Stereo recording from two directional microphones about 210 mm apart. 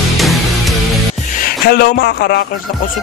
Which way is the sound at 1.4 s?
45° left (ahead or behind).